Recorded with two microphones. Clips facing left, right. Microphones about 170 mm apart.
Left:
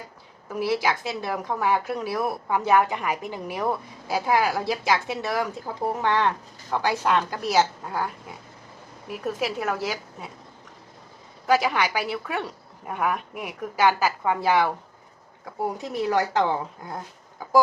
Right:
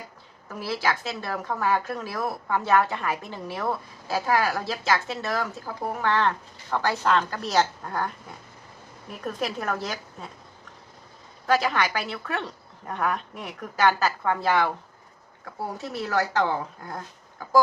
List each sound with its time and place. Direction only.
0.4 s a woman's voice: 15° left (ahead or behind)
9.2 s a woman's voice: 5° left (ahead or behind)
11.4 s a woman's voice: 10° left (ahead or behind)
15.8 s a woman's voice: 15° left (ahead or behind)